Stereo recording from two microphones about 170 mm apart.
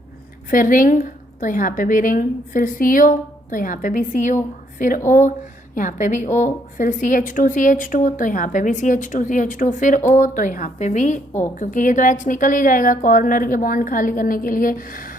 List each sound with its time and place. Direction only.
0.5 s a woman's voice: 55° left (ahead or behind)